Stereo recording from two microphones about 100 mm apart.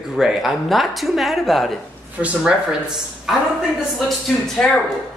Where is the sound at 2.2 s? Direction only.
15° right (ahead or behind).